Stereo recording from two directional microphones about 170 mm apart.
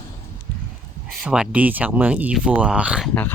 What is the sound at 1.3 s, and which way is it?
Speech, 5° right (ahead or behind).